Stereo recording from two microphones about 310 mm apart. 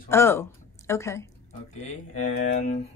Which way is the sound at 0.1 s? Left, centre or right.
Centre.